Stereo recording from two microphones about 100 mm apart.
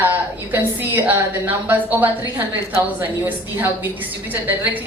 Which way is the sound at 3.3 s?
20° right (ahead or behind).